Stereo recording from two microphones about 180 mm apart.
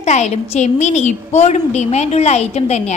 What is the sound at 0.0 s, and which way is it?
A woman's voice, 40° left (ahead or behind).